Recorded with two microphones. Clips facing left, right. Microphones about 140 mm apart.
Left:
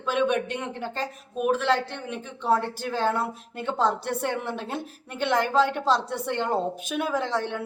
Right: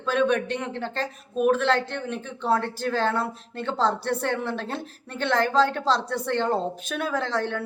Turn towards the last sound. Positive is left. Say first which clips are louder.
# even
turn(degrees=15)  # may be behind; listen again after turning